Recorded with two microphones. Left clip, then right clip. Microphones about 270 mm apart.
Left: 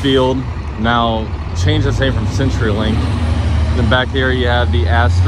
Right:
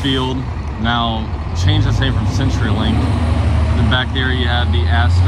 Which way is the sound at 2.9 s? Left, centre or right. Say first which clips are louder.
Right 1 dB; right.